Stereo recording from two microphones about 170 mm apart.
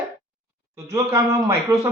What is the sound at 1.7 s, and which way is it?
Speech, 15° right (ahead or behind).